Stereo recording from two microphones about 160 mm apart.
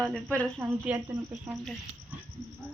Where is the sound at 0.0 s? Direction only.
5° left (ahead or behind).